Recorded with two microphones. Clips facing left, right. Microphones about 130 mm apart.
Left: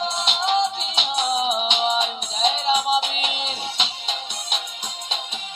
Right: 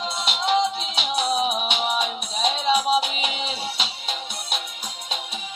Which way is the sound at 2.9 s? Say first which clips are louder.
Even; 40° right (ahead or behind).